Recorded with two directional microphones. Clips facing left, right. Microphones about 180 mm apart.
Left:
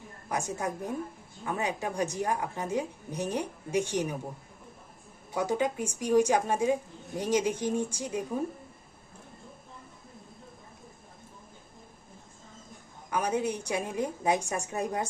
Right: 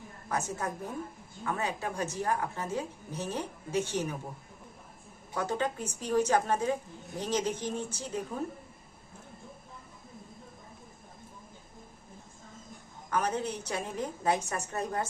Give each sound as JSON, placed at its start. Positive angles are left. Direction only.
{"t": 0.3, "sound": "a woman's voice", "side_deg": 15}
{"t": 5.3, "sound": "a woman's voice", "side_deg": 10}
{"t": 13.1, "sound": "a woman's voice", "side_deg": 10}